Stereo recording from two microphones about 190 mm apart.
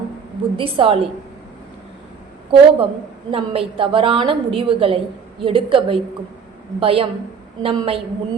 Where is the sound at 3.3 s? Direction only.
30° right (ahead or behind).